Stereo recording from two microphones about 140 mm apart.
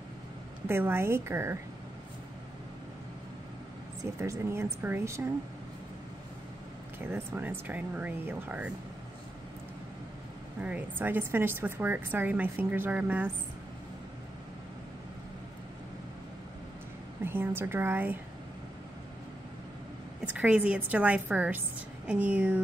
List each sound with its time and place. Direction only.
0.7 s speech: 15° right (ahead or behind)
4.0 s a woman's voice: 20° right (ahead or behind)
7.1 s speech: 15° right (ahead or behind)
10.6 s speech: 15° right (ahead or behind)
17.2 s speech: 15° right (ahead or behind)
20.3 s speech: 10° right (ahead or behind)